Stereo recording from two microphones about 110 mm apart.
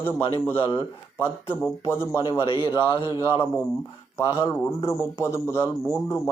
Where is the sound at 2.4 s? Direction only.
50° left (ahead or behind).